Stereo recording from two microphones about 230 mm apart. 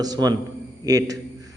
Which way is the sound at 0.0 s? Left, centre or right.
Centre.